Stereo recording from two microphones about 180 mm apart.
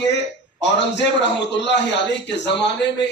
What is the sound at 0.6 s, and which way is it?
A man's voice, 75° left (ahead or behind).